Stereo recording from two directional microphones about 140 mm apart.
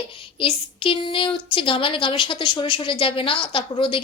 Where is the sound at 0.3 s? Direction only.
40° left (ahead or behind).